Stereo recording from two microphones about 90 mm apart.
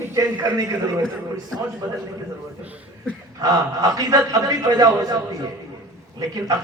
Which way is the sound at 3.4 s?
40° right (ahead or behind).